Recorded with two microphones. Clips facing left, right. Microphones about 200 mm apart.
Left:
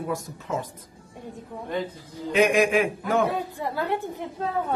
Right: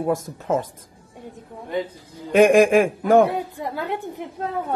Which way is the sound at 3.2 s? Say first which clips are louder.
Right 2 dB; 15° right (ahead or behind).